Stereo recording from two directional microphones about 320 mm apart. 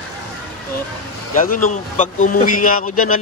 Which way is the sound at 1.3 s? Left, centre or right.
Left.